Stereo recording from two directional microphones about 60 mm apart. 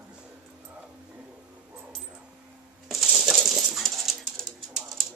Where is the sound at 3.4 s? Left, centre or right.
Centre.